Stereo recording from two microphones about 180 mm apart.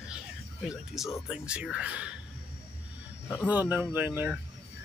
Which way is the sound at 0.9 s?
Centre (ahead or behind).